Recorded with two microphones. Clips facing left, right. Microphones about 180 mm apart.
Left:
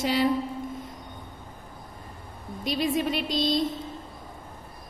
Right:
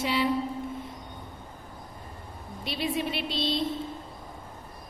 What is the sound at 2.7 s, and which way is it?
Speech, 40° left (ahead or behind).